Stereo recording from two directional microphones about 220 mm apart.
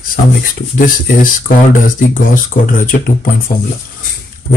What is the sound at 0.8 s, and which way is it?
Speech, 40° left (ahead or behind).